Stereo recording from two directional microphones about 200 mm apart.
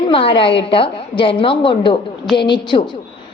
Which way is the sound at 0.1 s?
25° left (ahead or behind).